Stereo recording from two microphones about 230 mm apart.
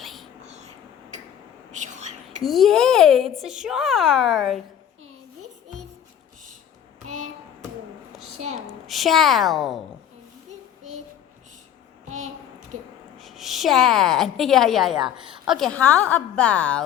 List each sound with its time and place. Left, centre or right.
0.0 s whispering: centre
0.4 s whispering: right
1.7 s whispering: right
2.4 s a child's voice: centre
8.4 s a sound: right
8.6 s a woman's voice: centre
12.0 s a sound: right
13.1 s a woman's voice: centre